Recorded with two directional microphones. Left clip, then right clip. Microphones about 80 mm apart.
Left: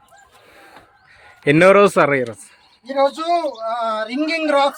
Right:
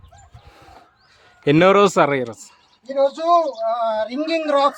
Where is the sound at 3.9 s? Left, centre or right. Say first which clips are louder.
Even; right.